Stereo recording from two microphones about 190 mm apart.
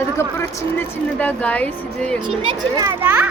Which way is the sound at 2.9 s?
10° right (ahead or behind).